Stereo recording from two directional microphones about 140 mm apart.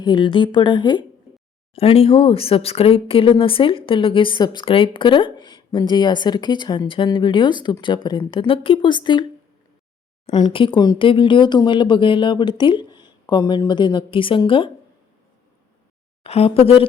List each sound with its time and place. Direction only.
0.0 s speech: 35° left (ahead or behind)
1.7 s speech: 45° left (ahead or behind)
10.3 s speech: 35° left (ahead or behind)
16.2 s speech: 45° left (ahead or behind)